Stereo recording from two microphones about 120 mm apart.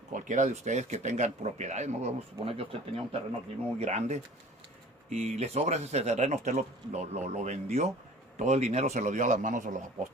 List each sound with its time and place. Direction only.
0.1 s speech: 90° right; by 3.2 s 55° right (ahead or behind)
3.8 s speech: 70° right (ahead or behind); by 10.1 s 90° right